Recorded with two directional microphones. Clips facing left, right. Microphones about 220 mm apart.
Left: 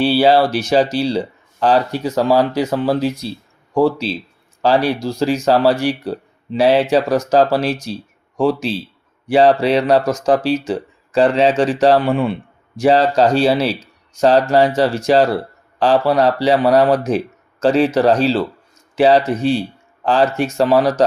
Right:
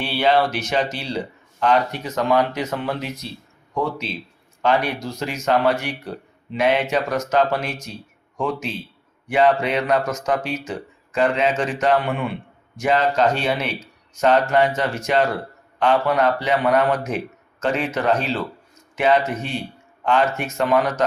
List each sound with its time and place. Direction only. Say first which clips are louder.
0.0 s speech: left 6 dB; 35° left (ahead or behind)